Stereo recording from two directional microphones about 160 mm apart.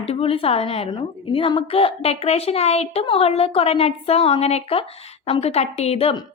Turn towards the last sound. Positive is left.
turn(degrees=35)  # may be behind; listen again after turning